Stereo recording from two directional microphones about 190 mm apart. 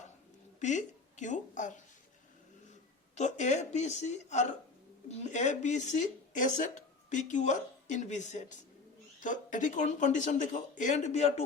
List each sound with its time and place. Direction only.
0.6 s speech: 40° left (ahead or behind)
3.2 s speech: 40° left (ahead or behind)